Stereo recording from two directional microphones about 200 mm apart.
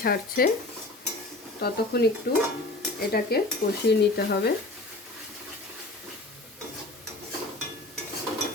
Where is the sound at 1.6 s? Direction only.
55° left (ahead or behind).